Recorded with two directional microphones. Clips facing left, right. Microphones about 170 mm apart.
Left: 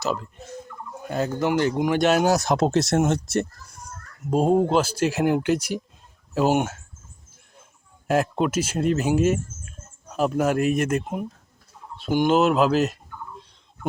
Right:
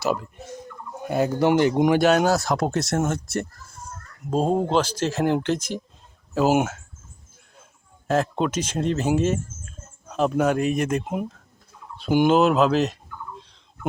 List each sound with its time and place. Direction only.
1.0 s speech: 10° right (ahead or behind)
1.5 s speech: 20° right (ahead or behind)
2.0 s speech: centre (ahead or behind)
2.2 s speech: 20° left (ahead or behind)
4.2 s speech: 10° left (ahead or behind)
6.3 s speech: 5° right (ahead or behind)
8.0 s speech: 10° left (ahead or behind); by 11.3 s 5° right (ahead or behind)
12.3 s speech: centre (ahead or behind)